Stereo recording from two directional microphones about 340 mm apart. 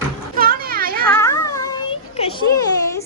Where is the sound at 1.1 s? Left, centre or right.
Centre.